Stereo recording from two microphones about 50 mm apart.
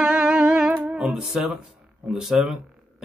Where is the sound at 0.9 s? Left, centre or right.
Centre.